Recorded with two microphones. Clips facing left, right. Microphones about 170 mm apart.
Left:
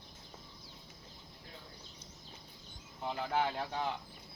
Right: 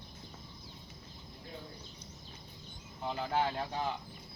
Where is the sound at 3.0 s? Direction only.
10° left (ahead or behind).